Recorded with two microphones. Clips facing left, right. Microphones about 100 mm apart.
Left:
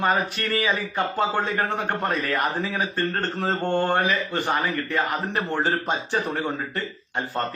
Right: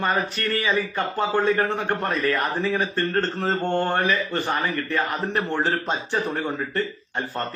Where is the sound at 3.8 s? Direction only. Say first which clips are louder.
Even; 20° left (ahead or behind).